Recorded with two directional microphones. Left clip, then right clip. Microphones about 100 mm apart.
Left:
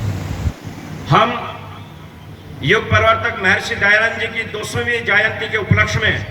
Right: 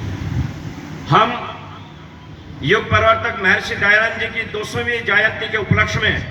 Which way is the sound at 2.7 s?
30° left (ahead or behind).